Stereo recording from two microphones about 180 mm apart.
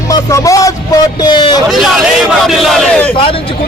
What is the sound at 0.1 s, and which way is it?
A man's voice, 20° left (ahead or behind).